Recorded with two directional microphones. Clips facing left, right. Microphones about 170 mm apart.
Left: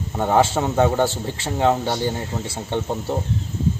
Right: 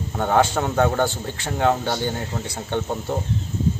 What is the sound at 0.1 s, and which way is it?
A man's voice, 5° left (ahead or behind).